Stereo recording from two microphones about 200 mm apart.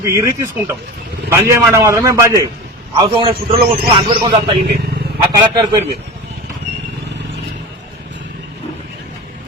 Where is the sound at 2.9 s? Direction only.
25° right (ahead or behind).